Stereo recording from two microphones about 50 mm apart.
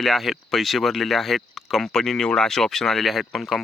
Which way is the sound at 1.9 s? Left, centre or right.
Centre.